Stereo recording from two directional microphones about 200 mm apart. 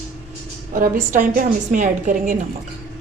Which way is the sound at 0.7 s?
45° right (ahead or behind).